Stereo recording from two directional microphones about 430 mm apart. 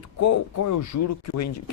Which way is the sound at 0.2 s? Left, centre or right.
Left.